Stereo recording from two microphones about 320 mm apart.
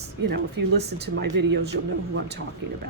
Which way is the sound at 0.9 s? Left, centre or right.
Right.